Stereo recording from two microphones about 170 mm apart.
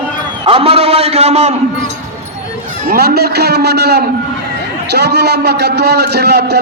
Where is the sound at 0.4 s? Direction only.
35° right (ahead or behind).